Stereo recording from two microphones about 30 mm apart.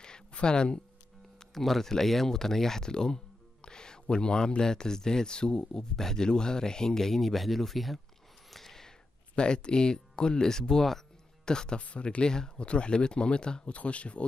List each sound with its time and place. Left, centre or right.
0.3 s speech: left
1.5 s speech: centre; by 5.9 s left
5.9 s speech: centre
6.2 s speech: left; by 8.0 s centre
8.5 s a sound: centre
9.3 s speech: left
11.8 s speech: left
12.2 s speech: left
12.5 s speech: left
13.7 s speech: left